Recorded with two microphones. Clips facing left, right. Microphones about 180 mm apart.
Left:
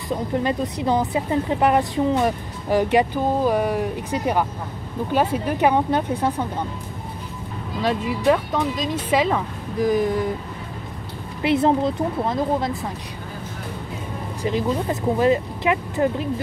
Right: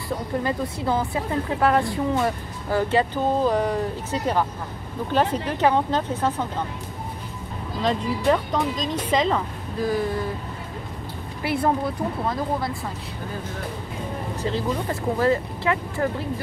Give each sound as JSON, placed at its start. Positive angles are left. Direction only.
{"t": 0.4, "sound": "a woman's voice", "side_deg": 20}
{"t": 7.8, "sound": "a woman's voice", "side_deg": 5}
{"t": 11.4, "sound": "speech", "side_deg": 20}
{"t": 14.4, "sound": "a woman's voice", "side_deg": 15}